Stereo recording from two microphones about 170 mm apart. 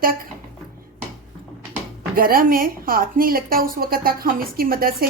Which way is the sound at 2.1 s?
60° right (ahead or behind).